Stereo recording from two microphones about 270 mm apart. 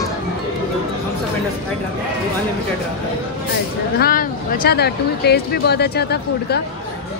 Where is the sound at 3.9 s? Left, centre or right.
Left.